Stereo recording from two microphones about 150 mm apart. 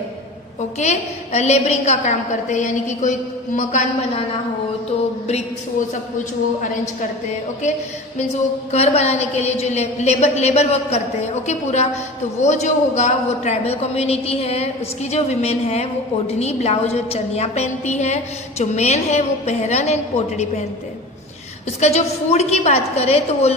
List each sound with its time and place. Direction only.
0.7 s a man's voice: 45° left (ahead or behind)
6.6 s a woman's voice: 55° left (ahead or behind)
8.2 s a man's voice: 50° left (ahead or behind)
21.7 s a man's voice: 50° left (ahead or behind)